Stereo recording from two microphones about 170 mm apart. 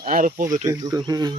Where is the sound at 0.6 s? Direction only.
20° right (ahead or behind).